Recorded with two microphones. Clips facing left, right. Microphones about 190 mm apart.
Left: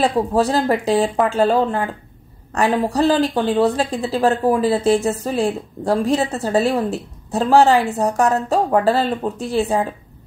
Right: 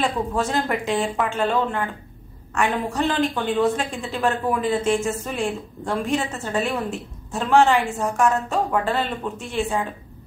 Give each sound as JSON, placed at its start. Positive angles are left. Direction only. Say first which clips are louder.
{"t": 0.0, "sound": "speech", "louder": "left 6 dB", "side_deg": 35}